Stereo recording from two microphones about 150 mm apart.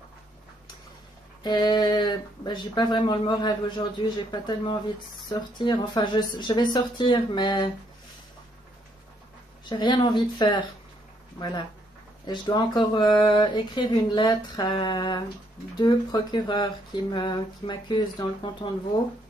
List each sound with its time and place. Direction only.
1.4 s speech: 30° left (ahead or behind)
9.7 s speech: 30° left (ahead or behind)